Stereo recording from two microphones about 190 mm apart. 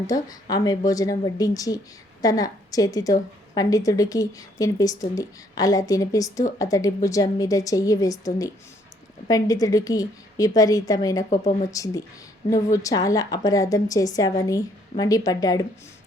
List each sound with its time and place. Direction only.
0.5 s a woman's voice: 20° left (ahead or behind)